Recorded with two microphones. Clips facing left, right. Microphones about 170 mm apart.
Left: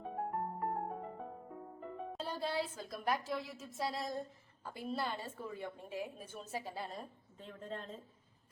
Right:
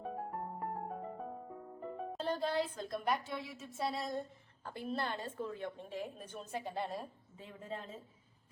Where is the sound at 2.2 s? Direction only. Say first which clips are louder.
Right 4 dB; 10° left (ahead or behind).